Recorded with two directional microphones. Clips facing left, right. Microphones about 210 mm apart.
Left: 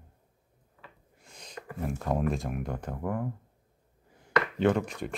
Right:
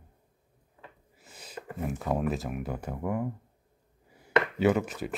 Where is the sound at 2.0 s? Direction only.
5° right (ahead or behind).